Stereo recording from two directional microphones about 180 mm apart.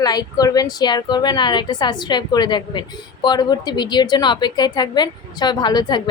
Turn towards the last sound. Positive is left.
turn(degrees=25)  # may be behind; listen again after turning